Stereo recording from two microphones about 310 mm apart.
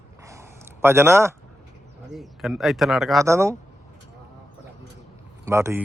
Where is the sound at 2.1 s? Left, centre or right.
Centre.